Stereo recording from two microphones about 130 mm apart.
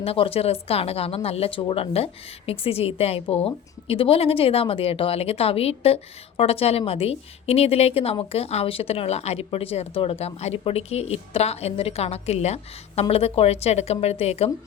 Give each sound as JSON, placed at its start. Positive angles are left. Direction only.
{"t": 0.0, "sound": "a woman's voice", "side_deg": 50}